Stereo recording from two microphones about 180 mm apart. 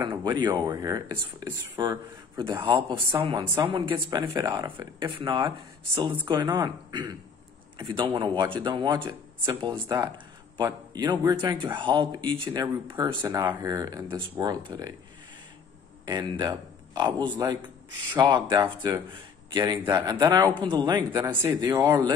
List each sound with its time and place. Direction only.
0.0 s speech: 25° right (ahead or behind)
16.1 s speech: 25° right (ahead or behind)